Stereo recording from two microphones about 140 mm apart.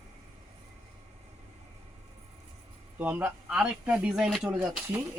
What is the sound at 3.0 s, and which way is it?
Speech, 10° right (ahead or behind).